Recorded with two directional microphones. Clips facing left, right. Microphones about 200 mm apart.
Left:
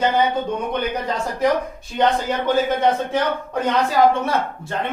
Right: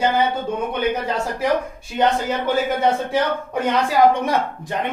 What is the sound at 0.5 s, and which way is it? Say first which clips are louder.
A man's voice: right 1 dB; 5° right (ahead or behind).